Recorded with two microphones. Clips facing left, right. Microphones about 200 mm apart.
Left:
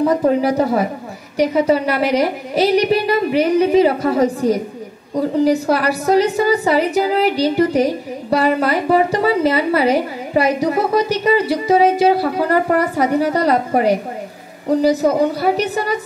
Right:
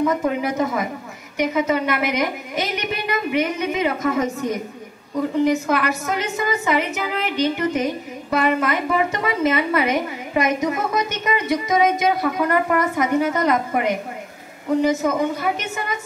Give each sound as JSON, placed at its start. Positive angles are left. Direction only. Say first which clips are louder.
{"t": 0.0, "sound": "a woman's voice", "louder": "left 6 dB", "side_deg": 35}